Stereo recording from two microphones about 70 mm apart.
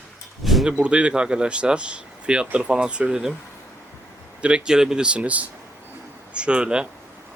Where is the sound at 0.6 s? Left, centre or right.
Centre.